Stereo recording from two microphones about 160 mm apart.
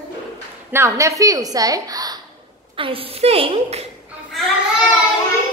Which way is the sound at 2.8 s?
35° right (ahead or behind).